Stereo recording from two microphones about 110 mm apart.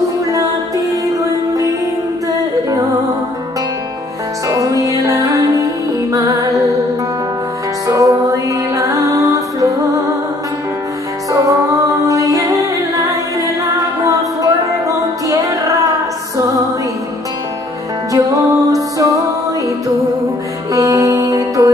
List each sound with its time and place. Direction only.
0.3 s music: 30° right (ahead or behind)
4.5 s music: 30° right (ahead or behind)
7.8 s music: 30° right (ahead or behind)
11.3 s music: 30° right (ahead or behind)
18.1 s music: 30° right (ahead or behind)
20.7 s music: 30° right (ahead or behind)